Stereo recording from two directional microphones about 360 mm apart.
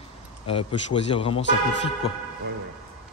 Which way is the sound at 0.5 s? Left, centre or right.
Centre.